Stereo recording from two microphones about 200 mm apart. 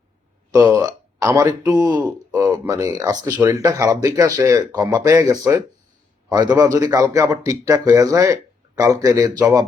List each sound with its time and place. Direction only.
0.5 s speech: 15° right (ahead or behind)
6.8 s speech: 15° right (ahead or behind)